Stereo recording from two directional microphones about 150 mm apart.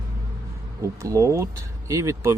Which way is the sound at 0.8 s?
20° right (ahead or behind).